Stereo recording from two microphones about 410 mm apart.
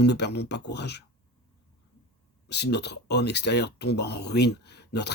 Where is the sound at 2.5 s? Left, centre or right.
Left.